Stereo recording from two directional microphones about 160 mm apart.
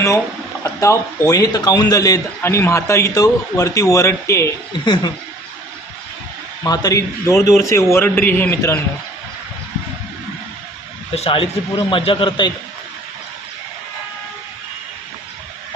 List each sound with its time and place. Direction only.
0.6 s a man's voice: 20° left (ahead or behind)
6.6 s a man's voice: 20° left (ahead or behind)
11.1 s a man's voice: 35° left (ahead or behind)